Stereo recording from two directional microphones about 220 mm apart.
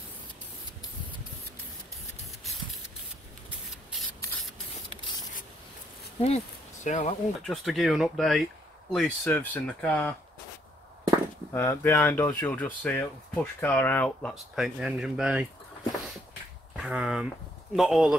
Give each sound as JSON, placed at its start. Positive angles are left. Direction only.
{"t": 6.2, "sound": "speech", "side_deg": 30}
{"t": 7.4, "sound": "speech", "side_deg": 0}
{"t": 11.5, "sound": "speech", "side_deg": 10}
{"t": 16.7, "sound": "speech", "side_deg": -5}